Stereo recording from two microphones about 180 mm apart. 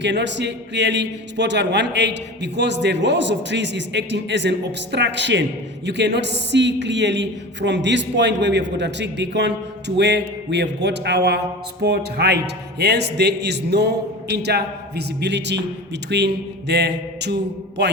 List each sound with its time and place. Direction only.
0.0 s a man's voice: 75° right (ahead or behind)